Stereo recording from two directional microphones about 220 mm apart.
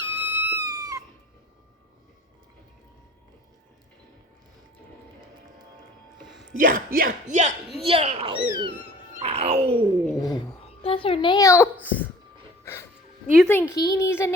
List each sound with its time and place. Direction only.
0.0 s a sound: 10° right (ahead or behind)
6.6 s speech: 40° right (ahead or behind)
10.2 s a child's voice: 20° left (ahead or behind)
12.6 s music: 10° left (ahead or behind)
13.3 s a woman's voice: 5° left (ahead or behind)